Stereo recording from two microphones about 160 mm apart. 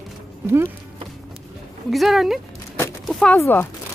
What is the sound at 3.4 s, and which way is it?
Speech, 15° left (ahead or behind).